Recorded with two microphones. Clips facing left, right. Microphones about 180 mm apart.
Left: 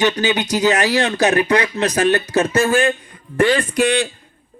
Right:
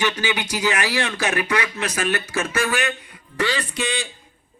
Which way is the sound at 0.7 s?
40° left (ahead or behind).